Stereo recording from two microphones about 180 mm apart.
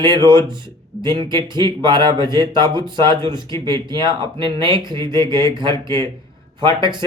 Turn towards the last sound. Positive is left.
turn(degrees=-25)  # may be behind; listen again after turning